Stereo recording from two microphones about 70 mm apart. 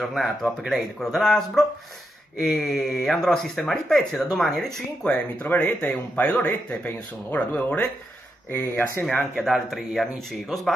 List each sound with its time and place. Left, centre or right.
0.1 s speech: centre
5.0 s speech: left
6.1 s a man's voice: left
8.5 s speech: left
9.4 s speech: centre